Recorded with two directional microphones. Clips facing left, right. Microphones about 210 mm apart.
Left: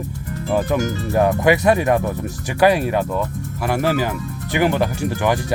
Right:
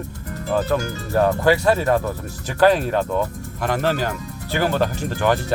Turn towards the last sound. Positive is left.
turn(degrees=10)  # may be behind; listen again after turning